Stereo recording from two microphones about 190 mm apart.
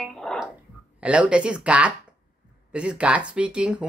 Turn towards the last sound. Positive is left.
turn(degrees=-5)  # may be behind; listen again after turning